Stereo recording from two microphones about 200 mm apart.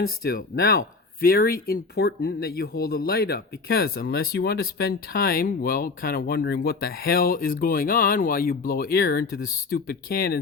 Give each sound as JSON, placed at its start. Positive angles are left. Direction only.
{"t": 0.0, "sound": "speech", "side_deg": 50}